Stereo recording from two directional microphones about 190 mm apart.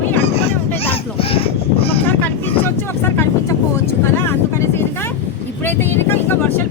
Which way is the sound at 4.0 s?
15° left (ahead or behind).